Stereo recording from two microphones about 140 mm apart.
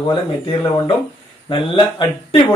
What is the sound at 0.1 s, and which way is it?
A man's voice, 35° left (ahead or behind).